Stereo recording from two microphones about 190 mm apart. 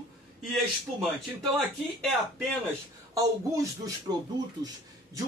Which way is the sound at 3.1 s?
15° right (ahead or behind).